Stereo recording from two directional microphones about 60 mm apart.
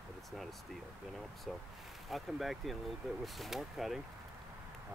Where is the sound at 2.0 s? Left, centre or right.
Centre.